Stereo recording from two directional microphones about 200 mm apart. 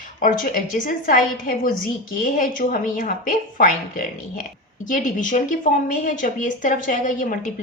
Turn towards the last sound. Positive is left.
turn(degrees=40)  # may be behind; listen again after turning